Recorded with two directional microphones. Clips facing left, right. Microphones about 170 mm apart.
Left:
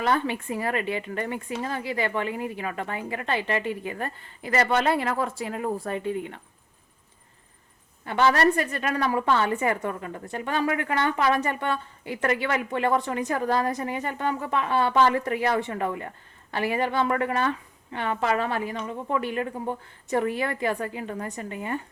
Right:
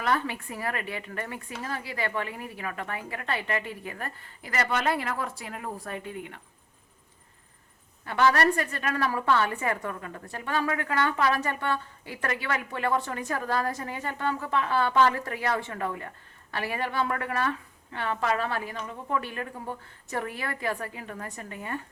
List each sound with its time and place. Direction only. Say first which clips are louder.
0.0 s a woman's voice: left 3 dB; 25° left (ahead or behind)
8.0 s a woman's voice: left 2 dB; 25° left (ahead or behind)